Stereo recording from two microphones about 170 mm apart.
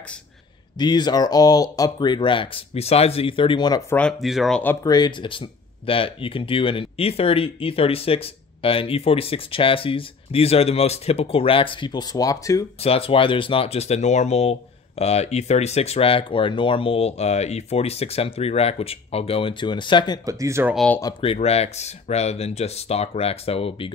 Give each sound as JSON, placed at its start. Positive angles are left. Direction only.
{"t": 0.7, "sound": "speech", "side_deg": 25}
{"t": 3.9, "sound": "speech", "side_deg": 5}
{"t": 4.8, "sound": "speech", "side_deg": 25}
{"t": 12.8, "sound": "speech", "side_deg": 35}
{"t": 20.2, "sound": "speech", "side_deg": -20}
{"t": 20.7, "sound": "speech", "side_deg": 5}
{"t": 21.2, "sound": "speech", "side_deg": 35}